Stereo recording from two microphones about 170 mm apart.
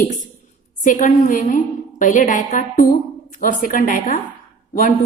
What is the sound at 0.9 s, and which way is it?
A woman's voice, 50° left (ahead or behind).